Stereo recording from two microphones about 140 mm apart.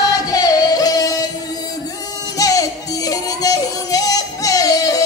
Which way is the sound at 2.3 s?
25° left (ahead or behind).